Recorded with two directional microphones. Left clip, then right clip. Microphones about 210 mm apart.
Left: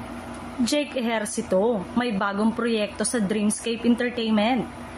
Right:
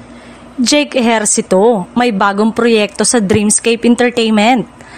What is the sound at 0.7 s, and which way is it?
A woman's voice, 50° right (ahead or behind).